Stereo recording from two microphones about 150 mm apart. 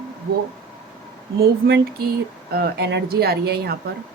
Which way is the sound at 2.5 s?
90° right.